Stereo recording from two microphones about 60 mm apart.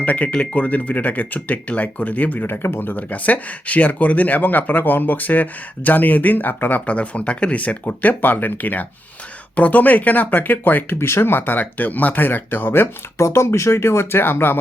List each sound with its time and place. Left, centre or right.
0.0 s speech: left
13.2 s speech: left